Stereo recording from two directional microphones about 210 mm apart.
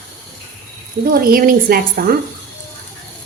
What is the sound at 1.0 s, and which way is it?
Speech, 45° right (ahead or behind).